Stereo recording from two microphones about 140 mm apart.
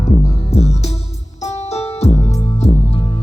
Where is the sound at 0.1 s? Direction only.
45° left (ahead or behind).